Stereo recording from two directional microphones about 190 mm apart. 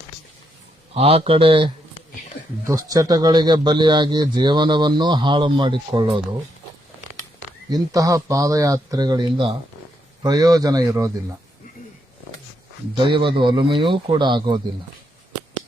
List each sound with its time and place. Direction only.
0.9 s speech: 30° right (ahead or behind)
7.7 s speech: 20° right (ahead or behind)
13.1 s speech: 25° right (ahead or behind)